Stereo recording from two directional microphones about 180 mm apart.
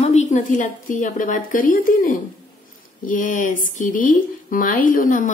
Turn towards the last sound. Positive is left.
turn(degrees=50)  # may be behind; listen again after turning